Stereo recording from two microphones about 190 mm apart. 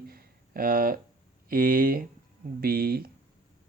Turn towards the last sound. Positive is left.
turn(degrees=-50)  # may be behind; listen again after turning